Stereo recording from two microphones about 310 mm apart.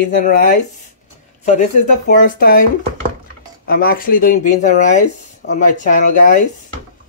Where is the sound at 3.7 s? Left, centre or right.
Left.